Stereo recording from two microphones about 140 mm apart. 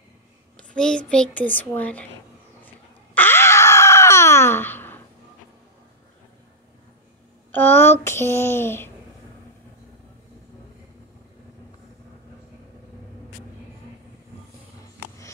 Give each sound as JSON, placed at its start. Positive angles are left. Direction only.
{"t": 0.7, "sound": "a child's voice", "side_deg": 5}
{"t": 3.2, "sound": "a sound", "side_deg": 15}
{"t": 7.5, "sound": "a child's voice", "side_deg": 15}